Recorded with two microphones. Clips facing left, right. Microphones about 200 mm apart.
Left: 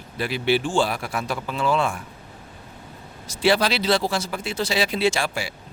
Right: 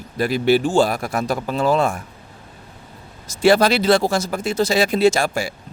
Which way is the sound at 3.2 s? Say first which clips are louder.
Right 6 dB; 45° right (ahead or behind).